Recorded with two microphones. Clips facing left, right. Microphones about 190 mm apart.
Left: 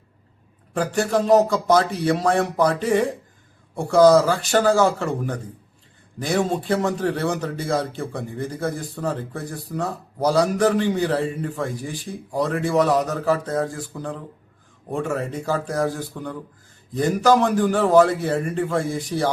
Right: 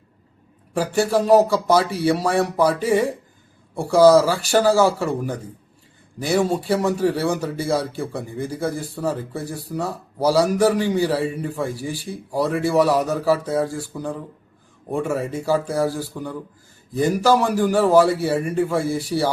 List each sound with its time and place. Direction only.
0.7 s a man's voice: 10° right (ahead or behind)